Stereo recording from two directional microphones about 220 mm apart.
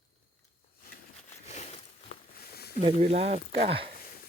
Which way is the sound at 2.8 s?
25° right (ahead or behind).